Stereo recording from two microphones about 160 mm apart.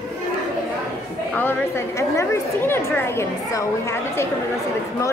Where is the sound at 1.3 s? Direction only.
10° left (ahead or behind).